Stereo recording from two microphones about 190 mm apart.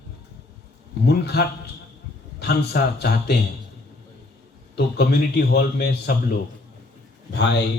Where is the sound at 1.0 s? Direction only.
60° left (ahead or behind).